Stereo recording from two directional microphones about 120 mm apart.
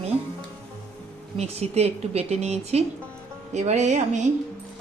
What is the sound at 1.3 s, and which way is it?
Speech, 65° right (ahead or behind).